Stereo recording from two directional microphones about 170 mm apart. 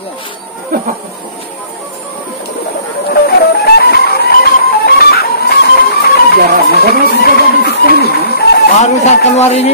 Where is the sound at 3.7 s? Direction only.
70° left (ahead or behind).